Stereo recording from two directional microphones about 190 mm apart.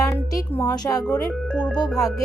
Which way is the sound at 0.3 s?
20° left (ahead or behind).